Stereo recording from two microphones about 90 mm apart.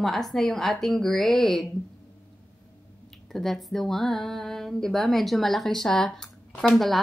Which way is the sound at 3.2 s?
Centre (ahead or behind).